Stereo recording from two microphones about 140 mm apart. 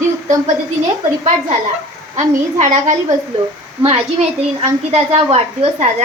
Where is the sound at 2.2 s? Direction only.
55° right (ahead or behind).